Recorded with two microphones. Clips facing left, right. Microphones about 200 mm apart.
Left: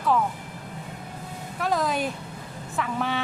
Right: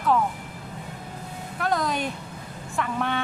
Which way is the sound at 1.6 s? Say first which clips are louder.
Left 1 dB; 5° left (ahead or behind).